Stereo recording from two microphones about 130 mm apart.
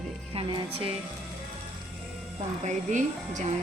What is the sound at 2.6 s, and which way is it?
Speech, 70° right (ahead or behind).